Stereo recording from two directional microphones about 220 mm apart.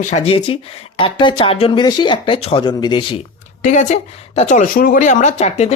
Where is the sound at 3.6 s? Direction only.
35° left (ahead or behind).